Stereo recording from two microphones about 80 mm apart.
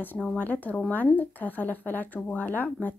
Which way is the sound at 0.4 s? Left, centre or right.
Left.